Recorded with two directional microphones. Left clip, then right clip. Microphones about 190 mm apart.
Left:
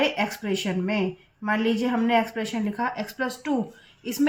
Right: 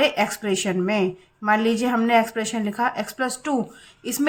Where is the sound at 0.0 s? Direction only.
35° right (ahead or behind).